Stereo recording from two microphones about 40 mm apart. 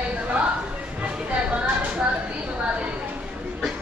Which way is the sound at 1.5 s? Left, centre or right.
Right.